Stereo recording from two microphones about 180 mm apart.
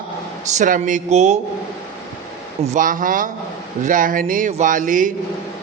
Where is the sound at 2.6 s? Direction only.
45° right (ahead or behind).